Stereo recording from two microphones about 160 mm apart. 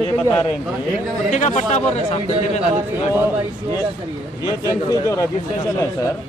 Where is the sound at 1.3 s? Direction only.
50° left (ahead or behind).